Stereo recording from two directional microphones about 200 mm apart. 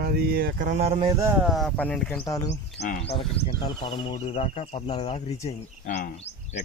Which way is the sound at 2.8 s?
35° left (ahead or behind).